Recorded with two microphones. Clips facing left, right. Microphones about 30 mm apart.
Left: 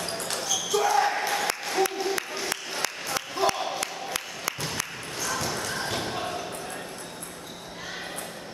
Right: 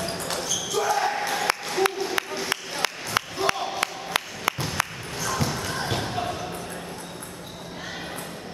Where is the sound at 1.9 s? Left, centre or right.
Centre.